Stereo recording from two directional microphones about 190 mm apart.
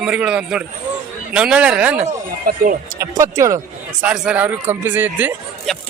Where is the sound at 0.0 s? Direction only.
5° right (ahead or behind).